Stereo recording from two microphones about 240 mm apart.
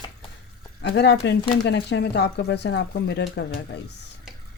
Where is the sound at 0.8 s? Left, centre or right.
Left.